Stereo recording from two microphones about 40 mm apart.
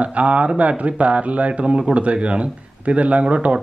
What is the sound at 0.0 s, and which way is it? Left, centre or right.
Speech, right.